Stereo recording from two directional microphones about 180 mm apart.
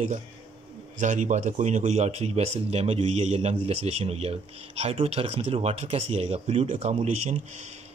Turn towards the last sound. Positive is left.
turn(degrees=-40)  # may be behind; listen again after turning